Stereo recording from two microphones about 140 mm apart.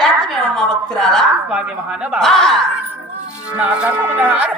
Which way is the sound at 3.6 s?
10° right (ahead or behind).